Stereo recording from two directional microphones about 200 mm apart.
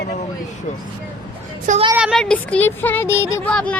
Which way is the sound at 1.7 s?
30° right (ahead or behind).